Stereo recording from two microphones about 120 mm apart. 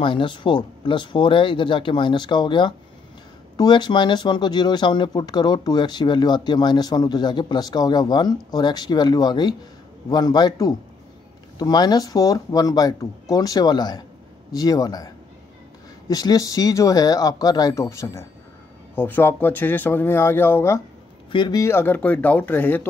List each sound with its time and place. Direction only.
0.0 s speech: 45° left (ahead or behind)
16.1 s speech: 30° left (ahead or behind)
21.3 s a man's voice: 40° left (ahead or behind)
21.5 s speech: 20° left (ahead or behind)